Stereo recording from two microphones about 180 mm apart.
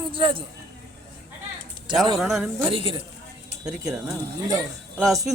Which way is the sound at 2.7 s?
30° right (ahead or behind).